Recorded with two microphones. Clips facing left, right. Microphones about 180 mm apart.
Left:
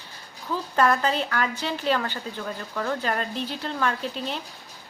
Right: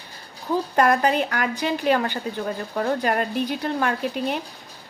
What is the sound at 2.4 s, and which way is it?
Speech, 35° right (ahead or behind).